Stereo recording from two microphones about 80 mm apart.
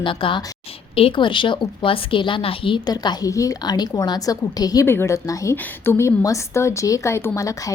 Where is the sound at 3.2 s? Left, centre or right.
Left.